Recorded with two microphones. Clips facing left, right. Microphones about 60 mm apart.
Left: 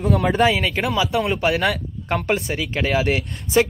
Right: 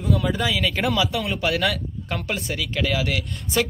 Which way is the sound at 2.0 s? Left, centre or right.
Left.